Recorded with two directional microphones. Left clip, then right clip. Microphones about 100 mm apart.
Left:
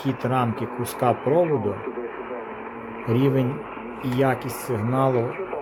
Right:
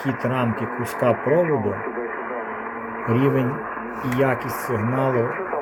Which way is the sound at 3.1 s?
15° left (ahead or behind).